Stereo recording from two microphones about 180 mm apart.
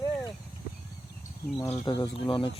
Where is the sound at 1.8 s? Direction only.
20° left (ahead or behind).